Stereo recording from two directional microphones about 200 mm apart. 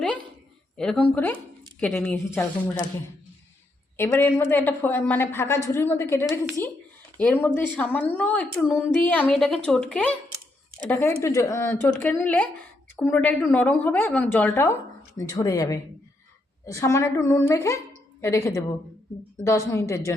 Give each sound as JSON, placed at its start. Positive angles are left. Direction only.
{"t": 0.8, "sound": "a woman's voice", "side_deg": 5}
{"t": 3.9, "sound": "a woman's voice", "side_deg": 10}
{"t": 7.4, "sound": "a woman's voice", "side_deg": 10}